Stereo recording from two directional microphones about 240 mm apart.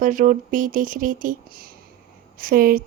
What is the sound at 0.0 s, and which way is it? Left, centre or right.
Speech, right.